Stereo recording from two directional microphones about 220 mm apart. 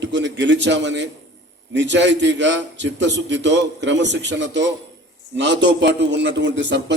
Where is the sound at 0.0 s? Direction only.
55° right (ahead or behind).